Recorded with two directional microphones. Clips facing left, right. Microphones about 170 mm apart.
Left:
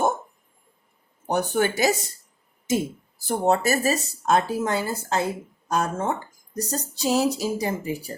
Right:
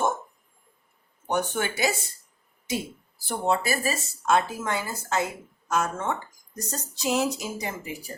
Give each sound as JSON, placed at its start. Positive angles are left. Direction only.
{"t": 1.3, "sound": "speech", "side_deg": 35}
{"t": 3.2, "sound": "speech", "side_deg": 45}